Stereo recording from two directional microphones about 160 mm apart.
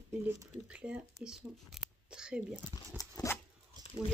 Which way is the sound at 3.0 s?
20° left (ahead or behind).